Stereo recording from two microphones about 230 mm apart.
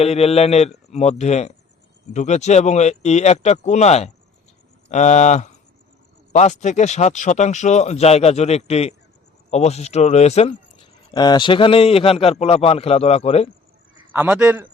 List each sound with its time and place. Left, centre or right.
0.0 s speech: left
14.1 s a man's voice: centre